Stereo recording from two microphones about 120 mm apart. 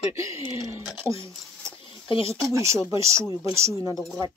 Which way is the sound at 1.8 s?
45° left (ahead or behind).